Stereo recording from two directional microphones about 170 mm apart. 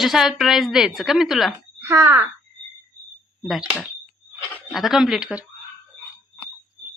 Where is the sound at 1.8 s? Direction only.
10° right (ahead or behind).